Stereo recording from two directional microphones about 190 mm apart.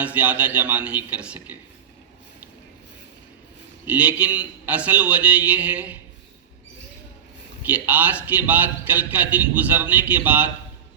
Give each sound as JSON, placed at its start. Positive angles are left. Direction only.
{"t": 0.0, "sound": "a man's voice", "side_deg": -10}
{"t": 3.8, "sound": "a man's voice", "side_deg": -5}
{"t": 7.6, "sound": "a man's voice", "side_deg": -10}